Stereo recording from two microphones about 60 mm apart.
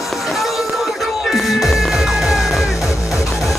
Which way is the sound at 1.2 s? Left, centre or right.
Centre.